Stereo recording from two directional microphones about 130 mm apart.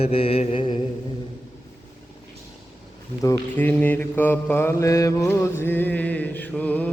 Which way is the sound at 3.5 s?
15° left (ahead or behind).